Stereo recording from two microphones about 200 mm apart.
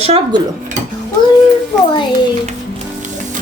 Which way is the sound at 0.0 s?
30° right (ahead or behind).